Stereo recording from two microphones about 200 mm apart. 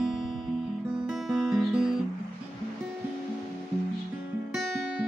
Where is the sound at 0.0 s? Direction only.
Centre (ahead or behind).